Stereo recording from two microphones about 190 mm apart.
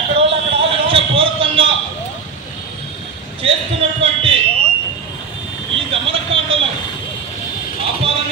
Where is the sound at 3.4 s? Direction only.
30° right (ahead or behind).